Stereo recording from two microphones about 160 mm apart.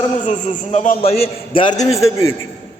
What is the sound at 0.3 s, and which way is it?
A man's voice, 50° left (ahead or behind).